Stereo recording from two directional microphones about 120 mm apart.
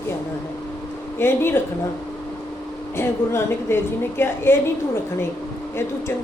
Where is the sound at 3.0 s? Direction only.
20° left (ahead or behind).